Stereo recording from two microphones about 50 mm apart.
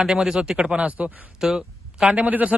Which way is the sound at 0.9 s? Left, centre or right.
Right.